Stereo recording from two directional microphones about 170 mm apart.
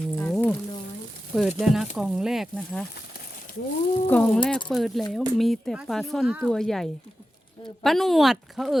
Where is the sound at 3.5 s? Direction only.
55° left (ahead or behind).